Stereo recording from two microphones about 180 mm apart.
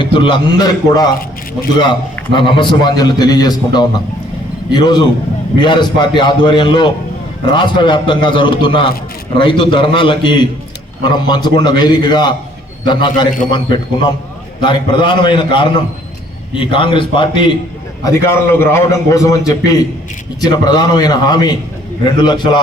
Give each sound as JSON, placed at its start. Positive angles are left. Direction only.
{"t": 0.0, "sound": "a man's voice", "side_deg": 25}
{"t": 4.7, "sound": "a man's voice", "side_deg": 25}
{"t": 18.0, "sound": "a man's voice", "side_deg": 15}